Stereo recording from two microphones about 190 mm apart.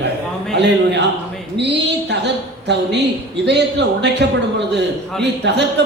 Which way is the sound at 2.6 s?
65° right (ahead or behind).